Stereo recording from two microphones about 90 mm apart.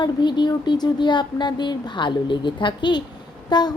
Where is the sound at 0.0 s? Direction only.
55° left (ahead or behind).